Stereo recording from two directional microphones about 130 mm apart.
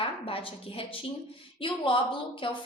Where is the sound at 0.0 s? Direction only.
45° left (ahead or behind).